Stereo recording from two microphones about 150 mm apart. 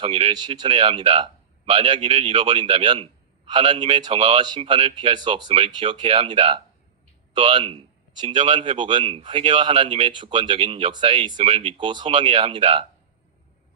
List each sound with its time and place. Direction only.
0.0 s a man's voice: 40° right (ahead or behind)